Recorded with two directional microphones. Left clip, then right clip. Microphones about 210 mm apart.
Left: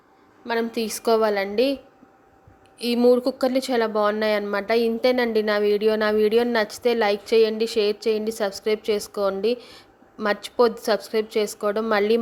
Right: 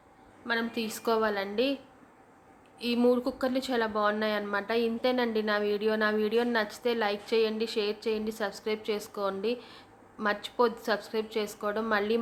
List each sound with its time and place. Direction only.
0.4 s a woman's voice: 25° left (ahead or behind)